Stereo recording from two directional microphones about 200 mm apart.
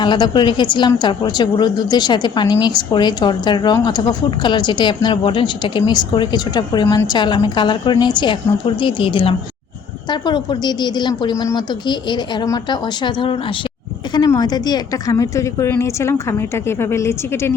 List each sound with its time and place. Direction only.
0.0 s a woman's voice: 25° left (ahead or behind)